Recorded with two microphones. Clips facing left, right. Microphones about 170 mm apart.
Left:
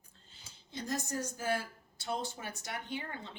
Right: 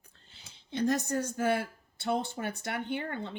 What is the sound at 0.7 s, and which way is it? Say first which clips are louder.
Speech: right 9 dB; 65° right (ahead or behind).